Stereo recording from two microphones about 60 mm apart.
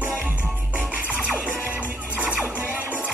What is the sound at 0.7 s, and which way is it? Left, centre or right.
Music, right.